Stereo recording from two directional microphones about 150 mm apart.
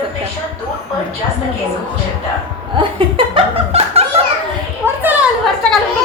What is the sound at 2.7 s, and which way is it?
Laughter, 35° right (ahead or behind).